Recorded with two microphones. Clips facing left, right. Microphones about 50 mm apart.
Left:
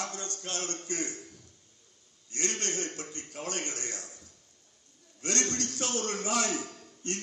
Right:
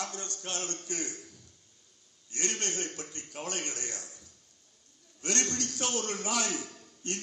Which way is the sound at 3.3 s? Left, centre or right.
Right.